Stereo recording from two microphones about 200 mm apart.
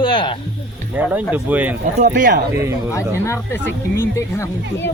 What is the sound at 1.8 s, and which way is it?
Speech, 35° right (ahead or behind).